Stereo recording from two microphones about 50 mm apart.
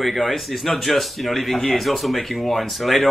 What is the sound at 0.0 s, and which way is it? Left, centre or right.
A man's voice, centre.